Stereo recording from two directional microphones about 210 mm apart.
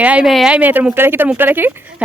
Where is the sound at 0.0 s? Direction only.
5° right (ahead or behind).